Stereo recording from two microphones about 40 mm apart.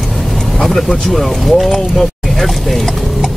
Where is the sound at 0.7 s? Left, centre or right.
Centre.